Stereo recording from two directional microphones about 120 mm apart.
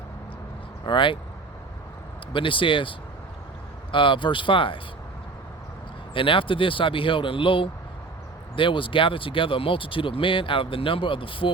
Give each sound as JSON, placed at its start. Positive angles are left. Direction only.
{"t": 0.9, "sound": "speech", "side_deg": 45}
{"t": 2.3, "sound": "speech", "side_deg": 45}
{"t": 3.9, "sound": "speech", "side_deg": 45}
{"t": 6.1, "sound": "speech", "side_deg": 45}